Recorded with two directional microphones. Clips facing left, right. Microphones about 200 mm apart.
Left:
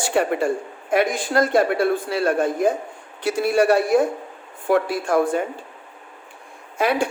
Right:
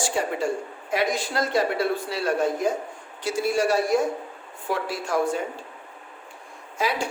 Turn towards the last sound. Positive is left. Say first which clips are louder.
# left 6 dB
turn(degrees=55)  # may be behind; listen again after turning